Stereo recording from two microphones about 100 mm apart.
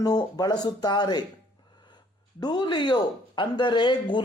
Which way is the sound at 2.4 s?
45° left (ahead or behind).